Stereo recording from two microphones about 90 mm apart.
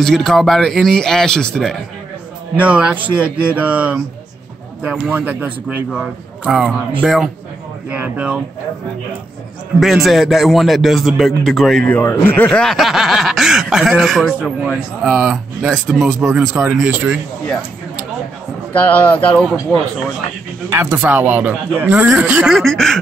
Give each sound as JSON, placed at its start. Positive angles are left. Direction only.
{"t": 0.0, "sound": "speech", "side_deg": 5}
{"t": 2.5, "sound": "speech", "side_deg": -15}
{"t": 5.1, "sound": "speech", "side_deg": -15}
{"t": 5.9, "sound": "a man's voice", "side_deg": -5}
{"t": 7.9, "sound": "speech", "side_deg": -15}
{"t": 9.8, "sound": "speech", "side_deg": 0}
{"t": 11.8, "sound": "a man's voice", "side_deg": 25}
{"t": 12.4, "sound": "speech", "side_deg": 10}
{"t": 12.7, "sound": "speech", "side_deg": -5}
{"t": 15.7, "sound": "speech", "side_deg": 5}
{"t": 16.3, "sound": "speech", "side_deg": -10}
{"t": 18.7, "sound": "speech", "side_deg": 15}
{"t": 20.7, "sound": "speech", "side_deg": -25}
{"t": 22.6, "sound": "speech", "side_deg": 0}